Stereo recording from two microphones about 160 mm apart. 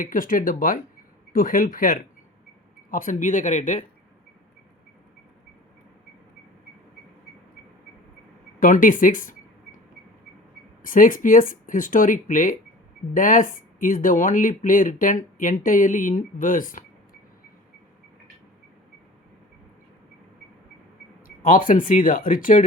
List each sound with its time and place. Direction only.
0.0 s speech: 60° left (ahead or behind)
8.5 s speech: 55° left (ahead or behind)
10.8 s speech: 60° left (ahead or behind)
21.2 s speech: 60° left (ahead or behind)